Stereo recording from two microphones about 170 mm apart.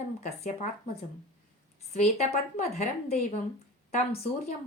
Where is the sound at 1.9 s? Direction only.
40° left (ahead or behind).